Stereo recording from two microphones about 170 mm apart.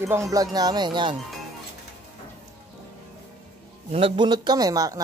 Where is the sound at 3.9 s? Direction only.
30° right (ahead or behind).